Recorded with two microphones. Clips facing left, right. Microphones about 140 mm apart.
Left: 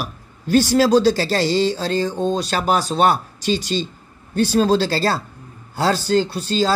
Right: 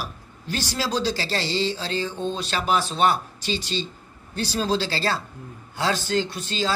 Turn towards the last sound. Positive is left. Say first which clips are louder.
# left 7 dB
turn(degrees=35)  # may be behind; listen again after turning